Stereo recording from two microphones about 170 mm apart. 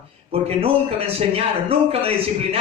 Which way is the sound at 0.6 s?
35° right (ahead or behind).